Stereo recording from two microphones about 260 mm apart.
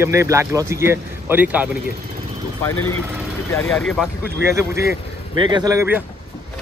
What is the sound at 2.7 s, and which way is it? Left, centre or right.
Speech, left.